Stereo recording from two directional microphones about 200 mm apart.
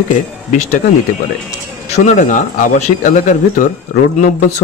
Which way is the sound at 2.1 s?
40° left (ahead or behind).